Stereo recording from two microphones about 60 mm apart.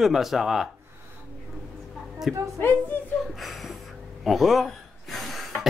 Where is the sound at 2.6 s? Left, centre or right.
Left.